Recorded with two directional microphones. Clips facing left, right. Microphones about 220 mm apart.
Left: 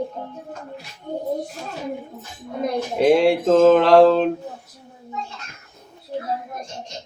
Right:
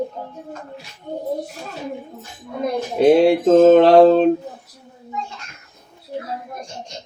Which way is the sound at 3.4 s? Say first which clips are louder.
Right 5 dB; 35° right (ahead or behind).